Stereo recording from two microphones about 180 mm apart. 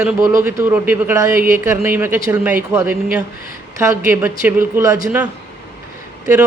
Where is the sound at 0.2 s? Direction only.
15° right (ahead or behind).